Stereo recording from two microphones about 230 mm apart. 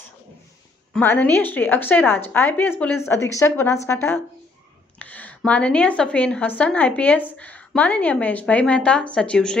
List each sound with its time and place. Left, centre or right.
0.9 s a woman's voice: centre